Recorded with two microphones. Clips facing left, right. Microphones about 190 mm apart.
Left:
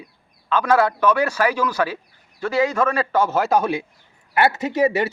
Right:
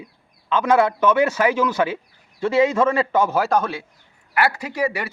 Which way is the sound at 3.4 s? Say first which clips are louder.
Left 1 dB; 5° left (ahead or behind).